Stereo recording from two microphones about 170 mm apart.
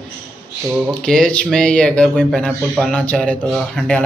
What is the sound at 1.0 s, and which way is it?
Speech, 5° left (ahead or behind).